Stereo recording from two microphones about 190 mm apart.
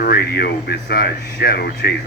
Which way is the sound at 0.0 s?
55° left (ahead or behind).